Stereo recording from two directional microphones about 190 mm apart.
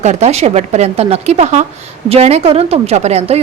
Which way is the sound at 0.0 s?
35° right (ahead or behind).